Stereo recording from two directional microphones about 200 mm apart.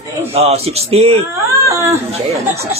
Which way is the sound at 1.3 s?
15° right (ahead or behind).